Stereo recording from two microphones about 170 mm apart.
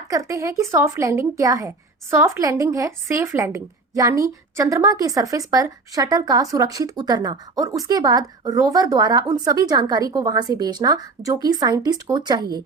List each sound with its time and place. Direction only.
0.1 s a woman's voice: 20° right (ahead or behind)